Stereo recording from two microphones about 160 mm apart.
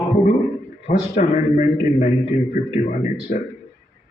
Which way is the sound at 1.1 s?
50° left (ahead or behind).